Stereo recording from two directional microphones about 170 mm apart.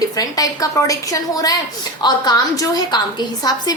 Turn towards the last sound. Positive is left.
turn(degrees=25)  # may be behind; listen again after turning